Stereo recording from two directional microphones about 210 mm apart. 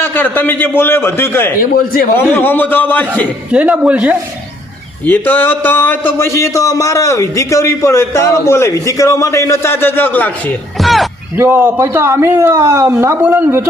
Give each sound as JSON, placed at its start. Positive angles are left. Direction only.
{"t": 0.0, "sound": "speech", "side_deg": 10}
{"t": 1.7, "sound": "a man's voice", "side_deg": 45}
{"t": 2.1, "sound": "speech", "side_deg": 10}
{"t": 3.5, "sound": "speech", "side_deg": -5}
{"t": 5.0, "sound": "speech", "side_deg": 10}
{"t": 11.3, "sound": "speech", "side_deg": -10}